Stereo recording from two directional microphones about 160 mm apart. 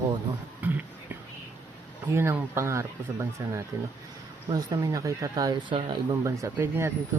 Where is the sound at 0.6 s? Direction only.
10° right (ahead or behind).